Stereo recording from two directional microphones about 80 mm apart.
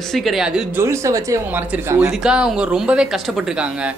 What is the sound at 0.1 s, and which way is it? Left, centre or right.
Speech, centre.